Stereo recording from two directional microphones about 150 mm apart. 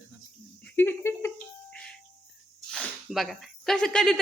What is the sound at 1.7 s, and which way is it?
Cricket, 5° left (ahead or behind).